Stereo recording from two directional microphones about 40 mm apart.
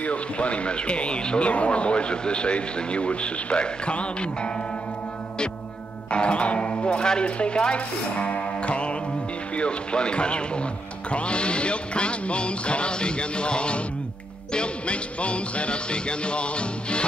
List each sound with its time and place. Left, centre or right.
0.0 s speech: left
6.0 s speech: left